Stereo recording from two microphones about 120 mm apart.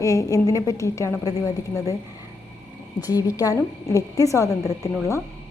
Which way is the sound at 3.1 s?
30° left (ahead or behind).